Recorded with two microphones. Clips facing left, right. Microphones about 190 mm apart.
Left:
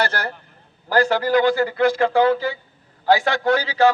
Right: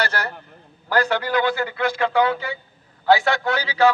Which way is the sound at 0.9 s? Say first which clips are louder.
Left 3 dB; 40° left (ahead or behind).